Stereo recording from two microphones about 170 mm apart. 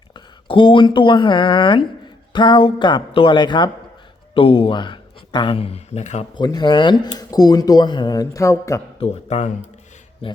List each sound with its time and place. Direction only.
0.1 s speech: 30° left (ahead or behind)
6.3 s speech: 25° left (ahead or behind)
9.0 s speech: 40° left (ahead or behind)